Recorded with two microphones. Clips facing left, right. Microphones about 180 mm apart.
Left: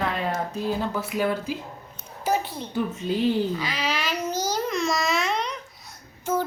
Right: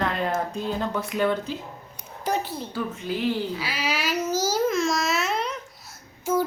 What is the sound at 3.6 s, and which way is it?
Babbling, 10° right (ahead or behind).